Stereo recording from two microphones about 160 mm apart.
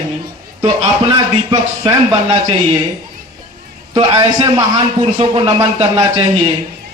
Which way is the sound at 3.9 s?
30° right (ahead or behind).